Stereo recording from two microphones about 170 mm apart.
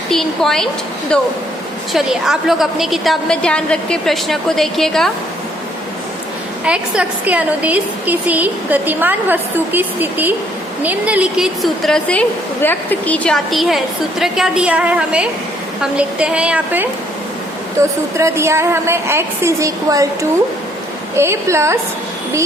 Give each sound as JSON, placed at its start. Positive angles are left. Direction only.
{"t": 0.1, "sound": "a woman's voice", "side_deg": 0}
{"t": 6.7, "sound": "a woman's voice", "side_deg": -5}
{"t": 21.2, "sound": "a woman's voice", "side_deg": -15}